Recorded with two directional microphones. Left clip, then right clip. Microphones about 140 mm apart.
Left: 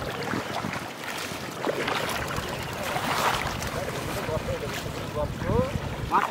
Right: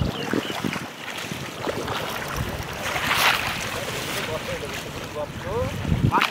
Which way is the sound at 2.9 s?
30° right (ahead or behind).